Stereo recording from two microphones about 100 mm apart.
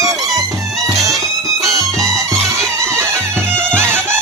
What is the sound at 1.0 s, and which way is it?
Music, 35° right (ahead or behind).